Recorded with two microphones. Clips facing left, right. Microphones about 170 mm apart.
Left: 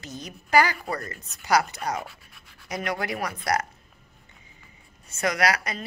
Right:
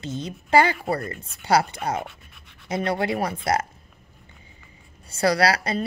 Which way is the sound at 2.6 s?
30° right (ahead or behind).